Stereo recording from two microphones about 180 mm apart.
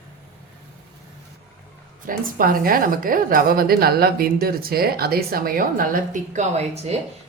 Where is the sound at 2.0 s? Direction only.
55° right (ahead or behind).